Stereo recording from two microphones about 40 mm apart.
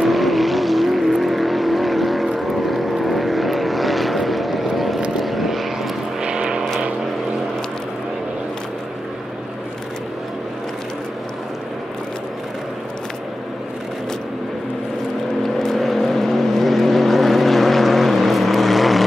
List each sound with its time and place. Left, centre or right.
0.0 s vehicle: centre
6.2 s vehicle: right
15.6 s vehicle: centre